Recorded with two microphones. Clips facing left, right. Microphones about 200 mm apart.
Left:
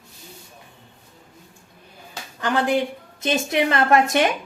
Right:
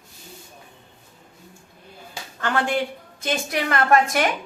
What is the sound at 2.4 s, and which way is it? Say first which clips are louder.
A woman's voice: left 3 dB; 15° left (ahead or behind).